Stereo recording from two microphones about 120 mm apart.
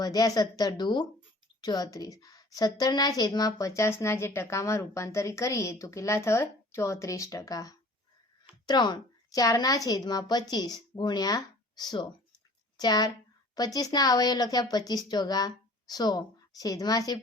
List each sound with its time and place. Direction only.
0.0 s a woman's voice: 30° left (ahead or behind)